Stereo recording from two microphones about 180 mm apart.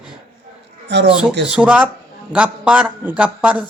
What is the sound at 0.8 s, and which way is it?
Speech, 75° right (ahead or behind).